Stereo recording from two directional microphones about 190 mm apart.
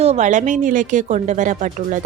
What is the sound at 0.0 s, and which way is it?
A woman's voice, 35° right (ahead or behind).